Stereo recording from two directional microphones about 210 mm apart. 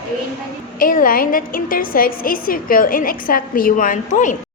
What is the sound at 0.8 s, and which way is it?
A woman's voice, 40° left (ahead or behind).